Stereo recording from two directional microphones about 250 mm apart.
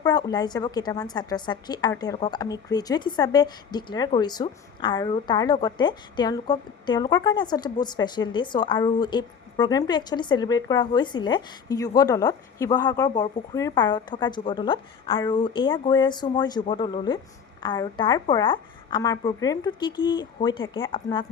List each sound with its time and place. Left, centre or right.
0.0 s a woman's voice: centre